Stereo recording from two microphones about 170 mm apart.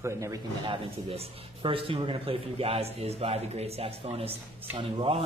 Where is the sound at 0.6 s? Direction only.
30° right (ahead or behind).